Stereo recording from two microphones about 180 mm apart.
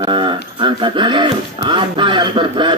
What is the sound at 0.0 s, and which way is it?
Speech, 30° right (ahead or behind).